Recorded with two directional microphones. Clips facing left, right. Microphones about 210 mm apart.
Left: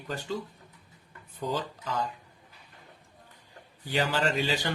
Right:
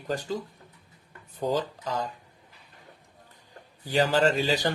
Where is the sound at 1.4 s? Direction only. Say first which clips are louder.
Right 5 dB; 40° right (ahead or behind).